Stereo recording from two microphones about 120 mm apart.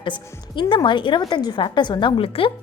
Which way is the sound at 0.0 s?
40° left (ahead or behind).